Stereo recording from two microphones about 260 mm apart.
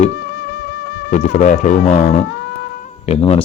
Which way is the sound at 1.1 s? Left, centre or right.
Left.